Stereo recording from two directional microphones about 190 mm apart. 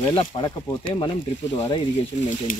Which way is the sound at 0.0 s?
25° left (ahead or behind).